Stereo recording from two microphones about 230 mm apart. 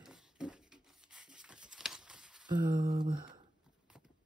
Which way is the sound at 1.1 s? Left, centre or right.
Centre.